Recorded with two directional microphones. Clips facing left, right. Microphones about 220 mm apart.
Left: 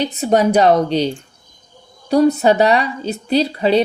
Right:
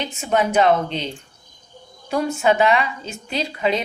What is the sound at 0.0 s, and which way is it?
Speech, 40° left (ahead or behind).